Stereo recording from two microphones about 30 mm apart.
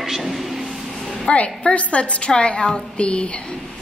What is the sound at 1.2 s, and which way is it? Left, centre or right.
A woman's voice, left.